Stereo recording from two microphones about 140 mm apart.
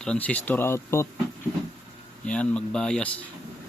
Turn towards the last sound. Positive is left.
turn(degrees=10)  # may be behind; listen again after turning